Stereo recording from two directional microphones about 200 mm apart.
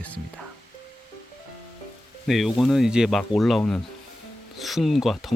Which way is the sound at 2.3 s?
Centre (ahead or behind).